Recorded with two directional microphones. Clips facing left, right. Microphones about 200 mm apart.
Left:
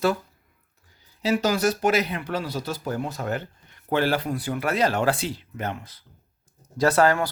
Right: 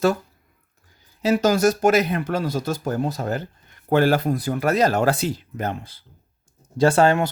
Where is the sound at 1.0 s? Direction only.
50° right (ahead or behind).